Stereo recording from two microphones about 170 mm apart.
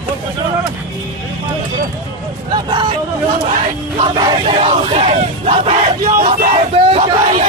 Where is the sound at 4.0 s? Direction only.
30° right (ahead or behind).